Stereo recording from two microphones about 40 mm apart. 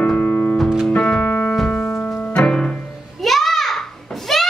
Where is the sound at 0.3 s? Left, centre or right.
Left.